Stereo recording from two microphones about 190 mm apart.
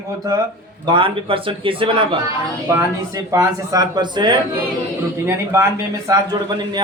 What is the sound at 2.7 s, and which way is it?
Speech, 15° right (ahead or behind).